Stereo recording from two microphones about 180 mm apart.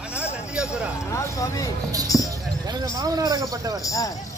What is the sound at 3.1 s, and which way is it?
Cricket, 20° right (ahead or behind).